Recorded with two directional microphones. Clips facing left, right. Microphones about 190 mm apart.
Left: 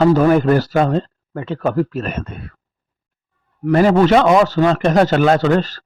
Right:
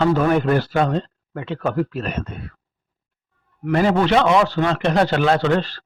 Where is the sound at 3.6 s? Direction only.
40° left (ahead or behind).